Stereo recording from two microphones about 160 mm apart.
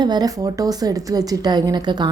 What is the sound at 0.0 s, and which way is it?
A woman's voice, 25° right (ahead or behind).